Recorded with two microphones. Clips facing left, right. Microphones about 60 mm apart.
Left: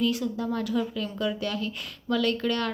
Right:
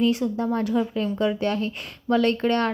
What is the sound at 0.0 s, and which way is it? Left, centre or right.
Speech, right.